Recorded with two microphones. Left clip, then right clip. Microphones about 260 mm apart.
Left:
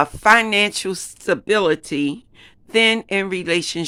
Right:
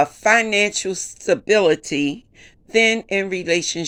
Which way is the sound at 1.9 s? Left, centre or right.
Left.